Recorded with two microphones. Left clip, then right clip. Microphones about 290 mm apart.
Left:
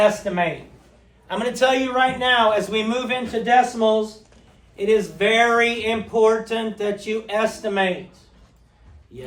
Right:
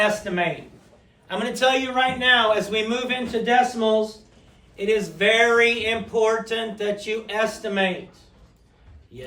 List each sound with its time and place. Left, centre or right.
0.0 s a man's voice: centre
9.1 s speech: left